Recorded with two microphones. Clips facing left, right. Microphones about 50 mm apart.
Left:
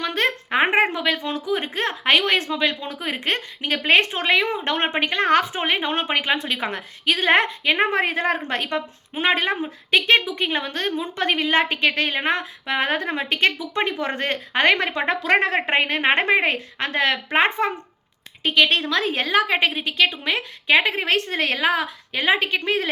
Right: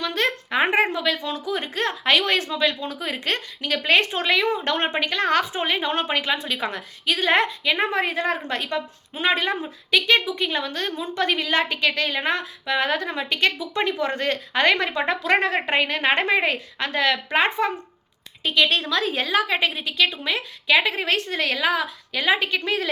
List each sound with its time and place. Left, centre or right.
0.0 s speech: left